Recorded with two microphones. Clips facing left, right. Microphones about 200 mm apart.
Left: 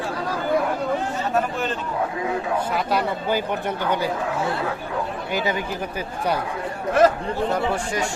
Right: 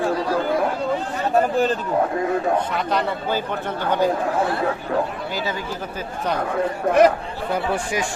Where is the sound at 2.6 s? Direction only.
10° left (ahead or behind).